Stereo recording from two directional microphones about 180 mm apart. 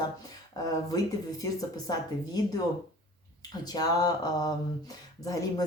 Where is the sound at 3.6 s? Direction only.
20° left (ahead or behind).